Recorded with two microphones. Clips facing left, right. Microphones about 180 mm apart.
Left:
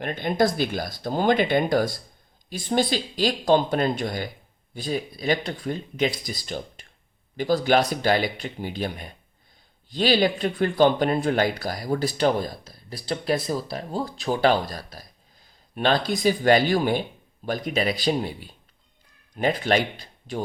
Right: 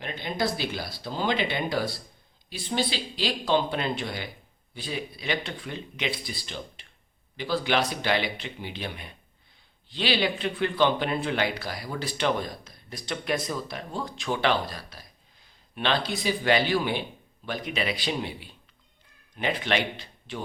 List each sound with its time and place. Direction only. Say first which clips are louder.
0.0 s speech: left 7 dB; 50° left (ahead or behind)